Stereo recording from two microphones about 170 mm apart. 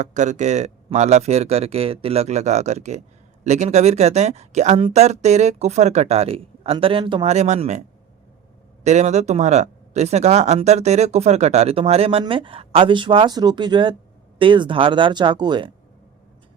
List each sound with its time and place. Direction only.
0.0 s speech: 45° right (ahead or behind); by 15.7 s 25° right (ahead or behind)